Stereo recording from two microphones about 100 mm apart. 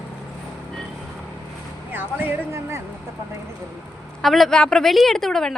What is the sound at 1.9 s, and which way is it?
Speech, 20° right (ahead or behind).